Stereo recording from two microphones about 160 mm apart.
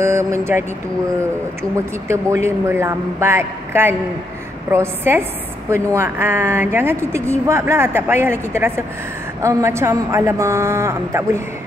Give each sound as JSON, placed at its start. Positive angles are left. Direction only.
{"t": 0.0, "sound": "a woman's voice", "side_deg": -15}